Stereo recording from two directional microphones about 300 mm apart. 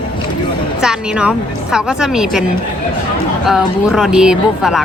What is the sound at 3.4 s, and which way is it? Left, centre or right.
A woman's voice, centre.